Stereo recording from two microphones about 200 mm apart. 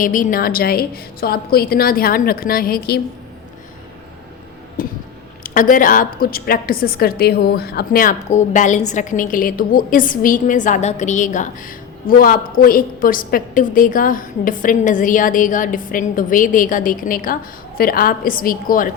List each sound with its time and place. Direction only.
0.0 s a woman's voice: 45° left (ahead or behind)
4.8 s a sound: 45° left (ahead or behind)
5.4 s a woman's voice: 40° left (ahead or behind)